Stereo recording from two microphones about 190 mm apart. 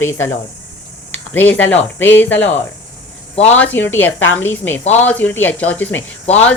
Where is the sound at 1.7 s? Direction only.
10° left (ahead or behind).